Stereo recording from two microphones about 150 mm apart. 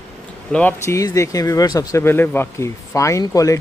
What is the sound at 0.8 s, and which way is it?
Speech, 20° left (ahead or behind).